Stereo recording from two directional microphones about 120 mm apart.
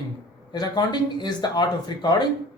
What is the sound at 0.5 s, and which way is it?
A man's voice, 35° left (ahead or behind).